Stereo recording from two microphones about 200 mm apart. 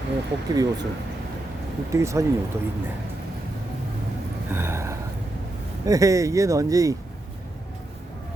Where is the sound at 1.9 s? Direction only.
15° right (ahead or behind).